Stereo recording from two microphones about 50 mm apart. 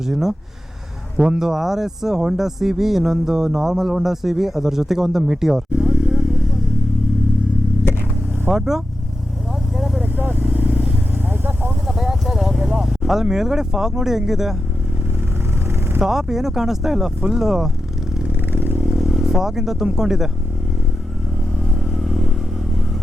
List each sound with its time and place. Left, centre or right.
0.0 s speech: centre
8.4 s speech: centre
9.7 s vehicle: centre
10.0 s vehicle: right
10.4 s vehicle: right
11.3 s a sound: right
11.9 s clip-clop: centre
13.3 s speech: centre
16.0 s speech: centre
18.3 s vehicle: right
18.9 s speech: centre
21.8 s vehicle: centre